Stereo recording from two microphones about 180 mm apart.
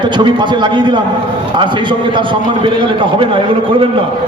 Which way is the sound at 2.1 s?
30° right (ahead or behind).